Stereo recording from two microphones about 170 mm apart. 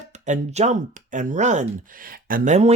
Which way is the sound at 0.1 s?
45° right (ahead or behind).